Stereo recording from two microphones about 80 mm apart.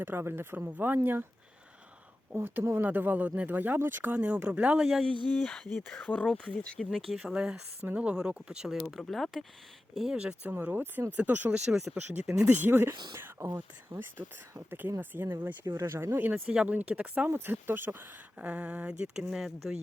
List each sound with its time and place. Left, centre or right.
0.0 s speech: right
2.3 s speech: right
4.2 s speech: centre
4.8 s speech: centre
5.0 s speech: right
5.3 s speech: centre
10.5 s speech: right
11.5 s speech: centre
12.5 s speech: right
16.5 s speech: centre
17.2 s speech: right
18.3 s speech: centre